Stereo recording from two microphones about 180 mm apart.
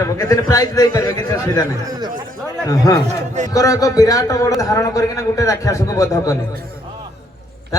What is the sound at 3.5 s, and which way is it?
A man's voice, 20° left (ahead or behind).